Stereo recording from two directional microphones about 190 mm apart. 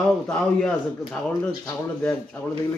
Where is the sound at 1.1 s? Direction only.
5° left (ahead or behind).